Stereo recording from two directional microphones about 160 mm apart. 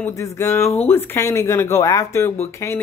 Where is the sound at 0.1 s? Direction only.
20° left (ahead or behind).